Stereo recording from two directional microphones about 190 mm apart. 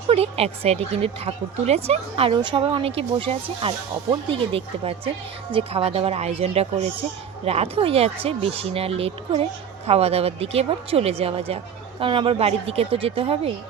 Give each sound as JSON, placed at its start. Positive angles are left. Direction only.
{"t": 0.1, "sound": "speech", "side_deg": -30}